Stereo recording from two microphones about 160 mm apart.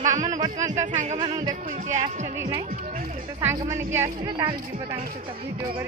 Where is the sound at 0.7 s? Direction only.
45° right (ahead or behind).